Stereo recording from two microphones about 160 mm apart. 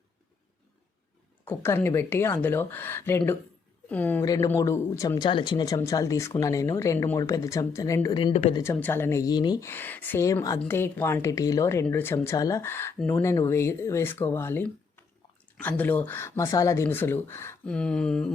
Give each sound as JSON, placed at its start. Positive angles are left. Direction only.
{"t": 1.5, "sound": "speech", "side_deg": 15}
{"t": 8.1, "sound": "speech", "side_deg": 35}
{"t": 8.5, "sound": "speech", "side_deg": 20}